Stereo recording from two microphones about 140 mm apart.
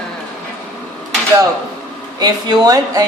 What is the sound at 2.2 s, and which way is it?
Speech, 30° right (ahead or behind).